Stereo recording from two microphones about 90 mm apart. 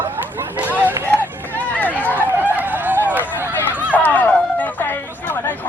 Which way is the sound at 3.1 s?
20° right (ahead or behind).